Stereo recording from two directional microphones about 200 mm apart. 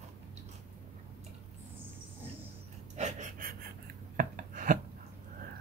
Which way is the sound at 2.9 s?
35° right (ahead or behind).